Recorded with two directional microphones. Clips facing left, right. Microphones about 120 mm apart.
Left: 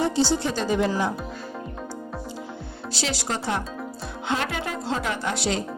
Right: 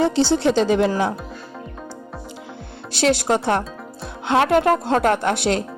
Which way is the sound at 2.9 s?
60° right (ahead or behind).